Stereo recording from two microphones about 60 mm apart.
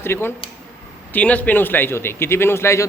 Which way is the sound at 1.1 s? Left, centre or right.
Left.